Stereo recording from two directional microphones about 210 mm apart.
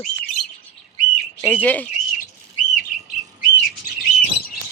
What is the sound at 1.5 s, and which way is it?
Speech, 5° left (ahead or behind).